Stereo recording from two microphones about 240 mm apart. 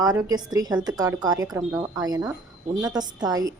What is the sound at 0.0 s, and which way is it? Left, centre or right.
A woman's voice, centre.